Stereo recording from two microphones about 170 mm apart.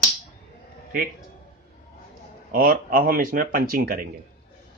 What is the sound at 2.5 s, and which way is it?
Speech, 60° right (ahead or behind).